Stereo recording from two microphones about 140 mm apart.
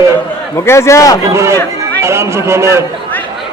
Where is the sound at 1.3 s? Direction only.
20° right (ahead or behind).